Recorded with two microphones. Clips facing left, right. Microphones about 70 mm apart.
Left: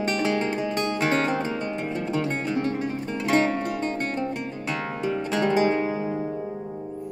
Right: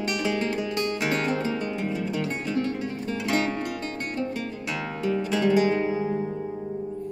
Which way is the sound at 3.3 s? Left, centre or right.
Centre.